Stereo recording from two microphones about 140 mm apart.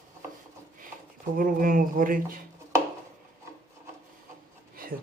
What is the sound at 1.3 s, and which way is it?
Speech, 80° right.